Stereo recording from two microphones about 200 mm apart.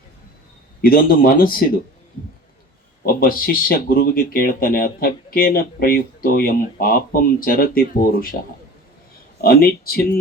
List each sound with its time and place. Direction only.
0.8 s speech: 45° left (ahead or behind)
3.1 s speech: 45° left (ahead or behind)
9.4 s speech: 50° left (ahead or behind)